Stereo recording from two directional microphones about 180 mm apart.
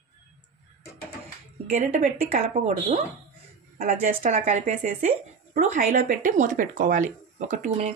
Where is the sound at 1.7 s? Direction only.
45° right (ahead or behind).